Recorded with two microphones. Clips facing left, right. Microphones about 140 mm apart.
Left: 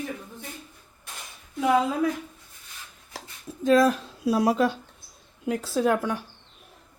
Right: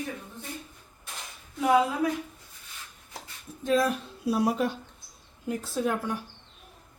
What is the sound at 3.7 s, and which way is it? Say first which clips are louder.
Speech: left 6 dB; 90° left.